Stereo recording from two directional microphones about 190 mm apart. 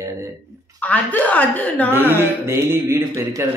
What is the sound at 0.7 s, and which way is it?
A woman's voice, 10° left (ahead or behind).